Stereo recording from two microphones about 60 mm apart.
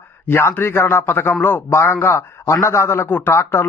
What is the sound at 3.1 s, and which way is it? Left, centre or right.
Speech, left.